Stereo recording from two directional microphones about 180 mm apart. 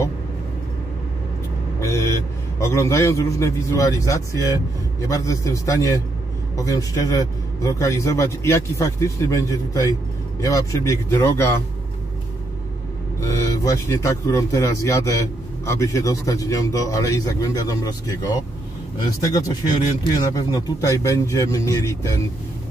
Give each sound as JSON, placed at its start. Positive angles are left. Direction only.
{"t": 1.8, "sound": "a man's voice", "side_deg": 15}
{"t": 13.2, "sound": "a man's voice", "side_deg": 15}